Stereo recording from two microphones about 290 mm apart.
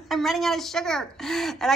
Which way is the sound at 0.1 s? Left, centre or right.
Centre.